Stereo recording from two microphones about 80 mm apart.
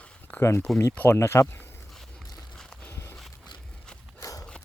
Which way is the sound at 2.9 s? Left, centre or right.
Left.